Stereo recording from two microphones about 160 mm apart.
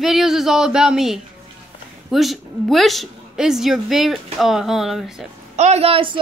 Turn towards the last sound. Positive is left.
turn(degrees=-35)  # may be behind; listen again after turning